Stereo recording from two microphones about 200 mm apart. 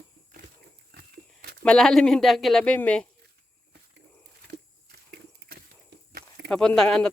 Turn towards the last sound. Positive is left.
turn(degrees=5)  # may be behind; listen again after turning